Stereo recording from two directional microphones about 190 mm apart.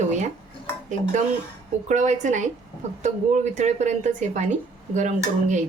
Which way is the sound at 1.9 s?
40° right (ahead or behind).